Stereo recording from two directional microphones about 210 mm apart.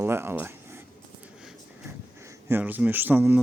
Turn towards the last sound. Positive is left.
turn(degrees=-10)  # may be behind; listen again after turning